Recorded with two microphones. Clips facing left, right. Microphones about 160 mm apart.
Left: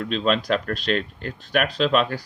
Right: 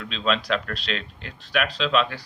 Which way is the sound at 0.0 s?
45° left (ahead or behind).